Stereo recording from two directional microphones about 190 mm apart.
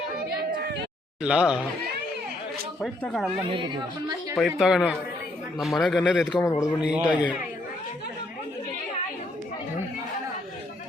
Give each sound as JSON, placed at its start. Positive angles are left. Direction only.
{"t": 0.2, "sound": "a sound", "side_deg": -60}
{"t": 1.2, "sound": "speech", "side_deg": -5}
{"t": 2.8, "sound": "speech", "side_deg": 0}
{"t": 3.5, "sound": "speech", "side_deg": -25}
{"t": 4.4, "sound": "speech", "side_deg": 0}
{"t": 6.4, "sound": "a man's voice", "side_deg": 15}
{"t": 6.9, "sound": "speech", "side_deg": -5}